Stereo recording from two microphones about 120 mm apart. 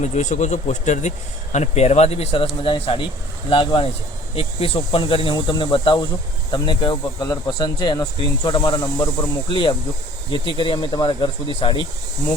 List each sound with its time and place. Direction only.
0.0 s speech: 80° left
1.5 s speech: 65° left (ahead or behind); by 11.9 s 45° left (ahead or behind)